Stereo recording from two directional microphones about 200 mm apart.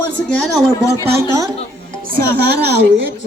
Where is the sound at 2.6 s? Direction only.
55° right (ahead or behind).